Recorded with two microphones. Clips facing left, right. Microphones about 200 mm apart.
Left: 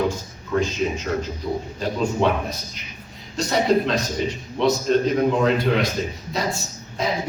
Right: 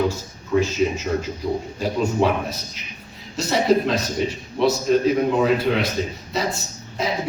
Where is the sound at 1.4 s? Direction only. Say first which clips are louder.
Right 2 dB; 15° right (ahead or behind).